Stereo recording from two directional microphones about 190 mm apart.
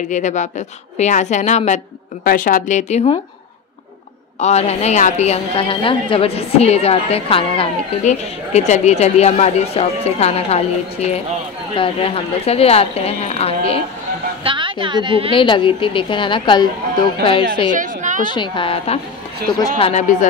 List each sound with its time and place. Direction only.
0.1 s a woman's voice: 40° left (ahead or behind)
4.4 s a woman's voice: 35° left (ahead or behind)
14.4 s a woman's voice: 25° right (ahead or behind)
15.3 s a woman's voice: 25° left (ahead or behind)
17.6 s a sound: 45° right (ahead or behind)
18.2 s a woman's voice: 25° left (ahead or behind)
19.4 s speech: 50° right (ahead or behind)
19.8 s a woman's voice: 35° left (ahead or behind)